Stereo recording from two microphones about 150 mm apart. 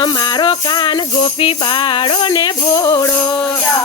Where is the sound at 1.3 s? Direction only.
35° left (ahead or behind).